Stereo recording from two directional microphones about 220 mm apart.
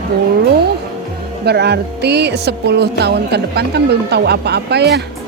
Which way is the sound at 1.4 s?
50° right (ahead or behind).